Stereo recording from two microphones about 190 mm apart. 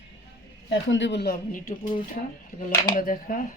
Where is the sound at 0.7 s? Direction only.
70° left (ahead or behind).